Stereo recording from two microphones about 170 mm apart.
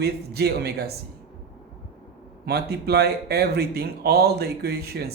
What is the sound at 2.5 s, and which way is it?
Speech, 70° right (ahead or behind).